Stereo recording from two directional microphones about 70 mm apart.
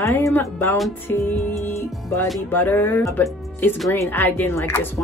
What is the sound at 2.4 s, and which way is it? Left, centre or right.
Speech, left.